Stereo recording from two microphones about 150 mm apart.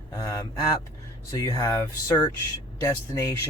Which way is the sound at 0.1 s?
25° left (ahead or behind).